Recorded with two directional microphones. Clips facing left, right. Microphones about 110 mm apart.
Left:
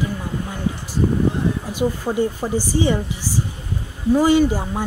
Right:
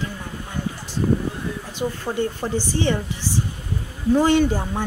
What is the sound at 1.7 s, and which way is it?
Speech, 10° left (ahead or behind).